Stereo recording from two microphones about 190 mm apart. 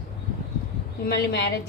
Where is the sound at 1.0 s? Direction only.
60° left (ahead or behind).